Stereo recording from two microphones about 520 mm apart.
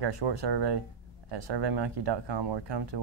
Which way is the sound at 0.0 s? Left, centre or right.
Right.